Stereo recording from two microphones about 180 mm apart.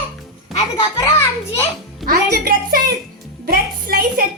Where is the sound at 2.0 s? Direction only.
55° right (ahead or behind).